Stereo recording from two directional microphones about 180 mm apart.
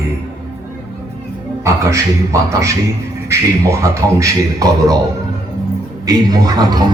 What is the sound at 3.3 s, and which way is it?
A man's voice, 15° right (ahead or behind).